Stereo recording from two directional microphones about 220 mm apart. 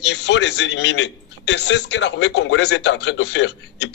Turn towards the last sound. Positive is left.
turn(degrees=55)  # may be behind; listen again after turning